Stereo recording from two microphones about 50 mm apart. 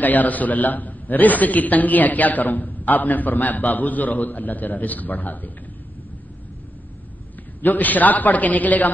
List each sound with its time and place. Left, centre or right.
0.0 s a man's voice: left
7.6 s a man's voice: left